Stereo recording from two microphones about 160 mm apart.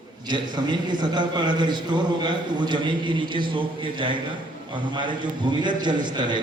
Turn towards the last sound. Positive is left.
turn(degrees=-30)  # may be behind; listen again after turning